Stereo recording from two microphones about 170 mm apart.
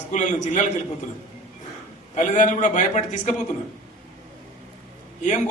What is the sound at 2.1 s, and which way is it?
A man's voice, 45° left (ahead or behind).